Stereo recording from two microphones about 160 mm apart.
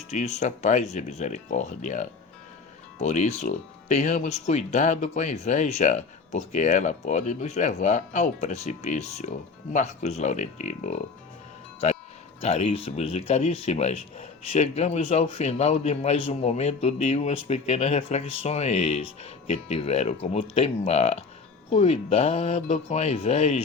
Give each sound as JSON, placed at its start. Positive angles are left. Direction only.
{"t": 0.1, "sound": "speech", "side_deg": 45}
{"t": 12.4, "sound": "speech", "side_deg": 40}